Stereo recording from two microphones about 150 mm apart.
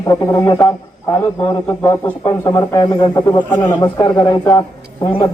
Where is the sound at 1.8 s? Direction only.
25° left (ahead or behind).